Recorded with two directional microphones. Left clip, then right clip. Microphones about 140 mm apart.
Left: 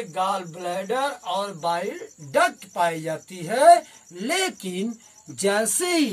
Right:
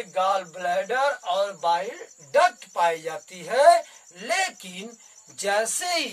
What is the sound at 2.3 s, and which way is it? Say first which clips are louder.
Speech: right 1 dB; 15° right (ahead or behind).